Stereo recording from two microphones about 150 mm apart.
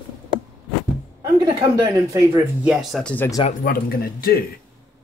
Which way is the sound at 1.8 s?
25° right (ahead or behind).